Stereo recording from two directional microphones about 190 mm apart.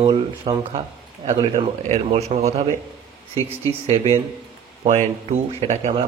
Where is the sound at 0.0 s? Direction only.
25° right (ahead or behind).